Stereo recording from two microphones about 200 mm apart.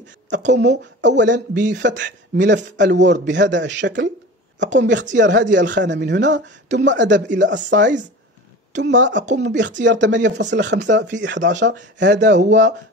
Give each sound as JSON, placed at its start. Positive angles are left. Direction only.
{"t": 0.5, "sound": "speech", "side_deg": -60}